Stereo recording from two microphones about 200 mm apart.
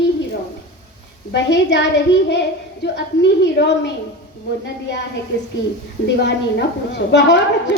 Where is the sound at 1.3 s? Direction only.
60° left (ahead or behind).